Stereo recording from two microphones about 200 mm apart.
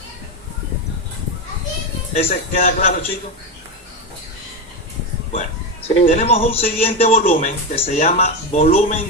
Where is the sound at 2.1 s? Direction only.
40° left (ahead or behind).